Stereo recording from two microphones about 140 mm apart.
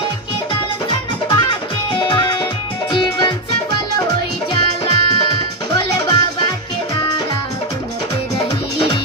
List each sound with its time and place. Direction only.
1.3 s music: 35° left (ahead or behind)
4.8 s music: 35° left (ahead or behind)